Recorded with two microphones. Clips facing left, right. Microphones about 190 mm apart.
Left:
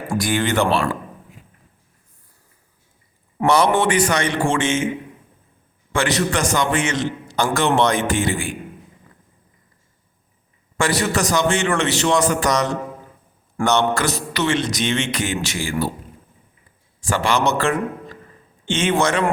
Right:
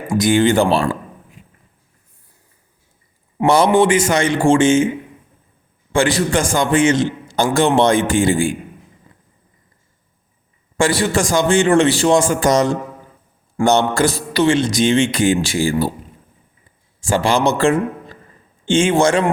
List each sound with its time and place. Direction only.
0.1 s a man's voice: 25° right (ahead or behind)
3.4 s a man's voice: 30° right (ahead or behind)
5.9 s a man's voice: 30° right (ahead or behind)
10.8 s a man's voice: 30° right (ahead or behind)
17.0 s a man's voice: 30° right (ahead or behind)